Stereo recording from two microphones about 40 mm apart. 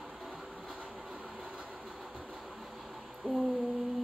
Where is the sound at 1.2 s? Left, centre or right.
Right.